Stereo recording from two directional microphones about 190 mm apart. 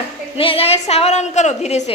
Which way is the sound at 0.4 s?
30° left (ahead or behind).